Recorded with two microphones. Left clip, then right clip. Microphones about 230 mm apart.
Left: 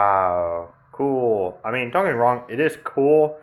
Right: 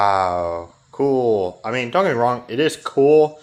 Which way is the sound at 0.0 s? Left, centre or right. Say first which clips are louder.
Right 1 dB; right.